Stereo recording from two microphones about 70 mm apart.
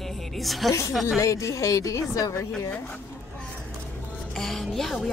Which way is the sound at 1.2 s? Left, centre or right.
Left.